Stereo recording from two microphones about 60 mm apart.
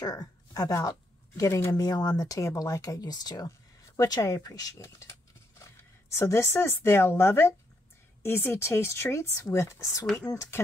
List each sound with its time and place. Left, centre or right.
0.0 s a woman's voice: left
1.8 s speech: left
6.1 s speech: left